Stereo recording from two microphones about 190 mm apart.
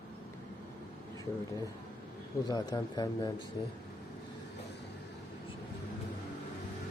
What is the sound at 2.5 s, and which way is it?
Speech, 20° left (ahead or behind).